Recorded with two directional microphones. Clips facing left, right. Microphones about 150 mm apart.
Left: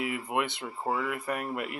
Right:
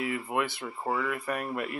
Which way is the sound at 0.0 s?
20° left (ahead or behind).